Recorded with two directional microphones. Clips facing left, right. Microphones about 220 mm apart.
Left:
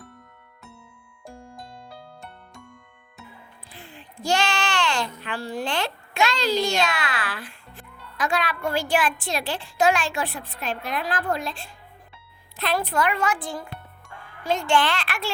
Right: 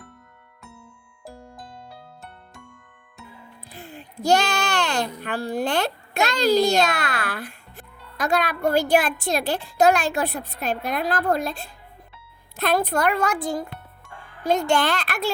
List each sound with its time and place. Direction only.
3.7 s a sound: 40° right (ahead or behind)
5.4 s a child's voice: 55° right (ahead or behind); by 11.5 s 40° right (ahead or behind)
12.5 s a woman's voice: 45° right (ahead or behind)